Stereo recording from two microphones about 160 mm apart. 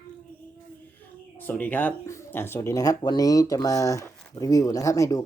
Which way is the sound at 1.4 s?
10° left (ahead or behind).